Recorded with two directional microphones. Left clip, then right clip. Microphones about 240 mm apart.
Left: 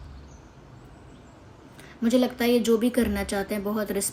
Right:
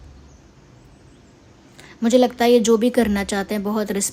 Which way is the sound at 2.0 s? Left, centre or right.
Right.